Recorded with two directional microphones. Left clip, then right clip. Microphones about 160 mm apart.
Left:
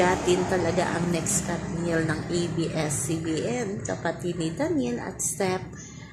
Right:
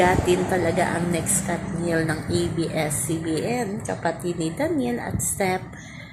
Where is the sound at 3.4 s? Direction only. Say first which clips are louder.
Right 3 dB; 5° left (ahead or behind).